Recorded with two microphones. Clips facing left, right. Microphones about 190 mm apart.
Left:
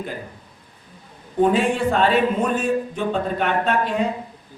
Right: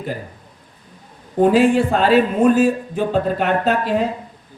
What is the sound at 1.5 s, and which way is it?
Speech, 5° right (ahead or behind).